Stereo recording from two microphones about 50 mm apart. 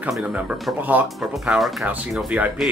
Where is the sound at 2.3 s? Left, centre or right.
Right.